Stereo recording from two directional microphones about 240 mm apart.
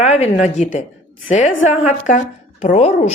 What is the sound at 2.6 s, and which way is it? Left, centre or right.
Speech, left.